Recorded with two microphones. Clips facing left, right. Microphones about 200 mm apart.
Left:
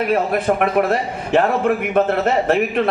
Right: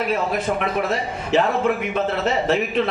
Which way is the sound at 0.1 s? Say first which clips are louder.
Left 4 dB; 55° left (ahead or behind).